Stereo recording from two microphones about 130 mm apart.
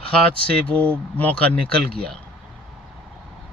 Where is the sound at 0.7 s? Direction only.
10° left (ahead or behind).